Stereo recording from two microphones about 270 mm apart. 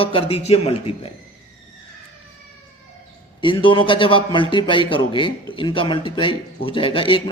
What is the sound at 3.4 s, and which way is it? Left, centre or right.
Speech, centre.